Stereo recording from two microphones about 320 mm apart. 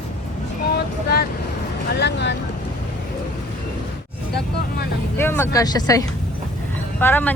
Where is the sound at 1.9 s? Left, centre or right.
Left.